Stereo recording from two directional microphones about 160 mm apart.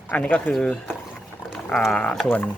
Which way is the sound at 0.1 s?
10° left (ahead or behind).